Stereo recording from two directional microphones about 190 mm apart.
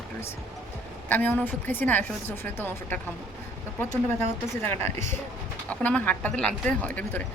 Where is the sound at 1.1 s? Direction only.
10° left (ahead or behind).